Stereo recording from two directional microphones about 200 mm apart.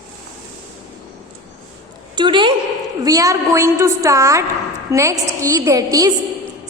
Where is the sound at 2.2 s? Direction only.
25° right (ahead or behind).